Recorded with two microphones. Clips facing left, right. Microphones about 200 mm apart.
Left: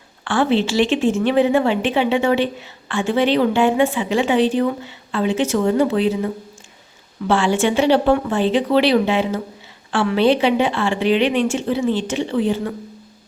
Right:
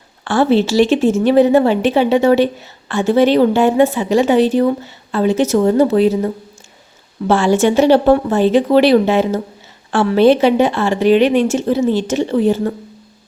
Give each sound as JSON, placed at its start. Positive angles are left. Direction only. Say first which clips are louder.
{"t": 0.3, "sound": "a woman's voice", "louder": "right 4 dB", "side_deg": -40}